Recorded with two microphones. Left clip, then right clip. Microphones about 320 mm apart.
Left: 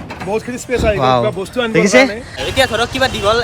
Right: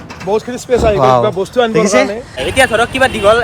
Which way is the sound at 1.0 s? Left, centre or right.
Centre.